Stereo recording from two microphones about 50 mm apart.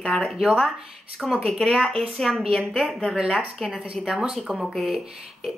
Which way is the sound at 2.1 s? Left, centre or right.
Centre.